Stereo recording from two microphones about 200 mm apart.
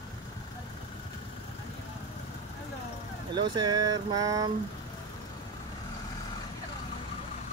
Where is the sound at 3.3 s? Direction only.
20° right (ahead or behind).